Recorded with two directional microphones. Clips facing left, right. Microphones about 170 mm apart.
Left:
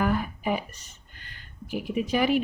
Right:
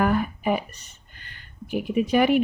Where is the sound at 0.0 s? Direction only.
60° right (ahead or behind).